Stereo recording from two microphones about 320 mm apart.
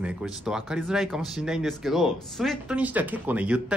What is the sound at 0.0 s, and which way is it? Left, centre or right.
Speech, centre.